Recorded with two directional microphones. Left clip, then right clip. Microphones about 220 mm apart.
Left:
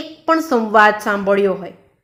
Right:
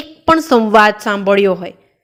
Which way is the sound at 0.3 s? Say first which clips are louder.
Right 5 dB; 35° right (ahead or behind).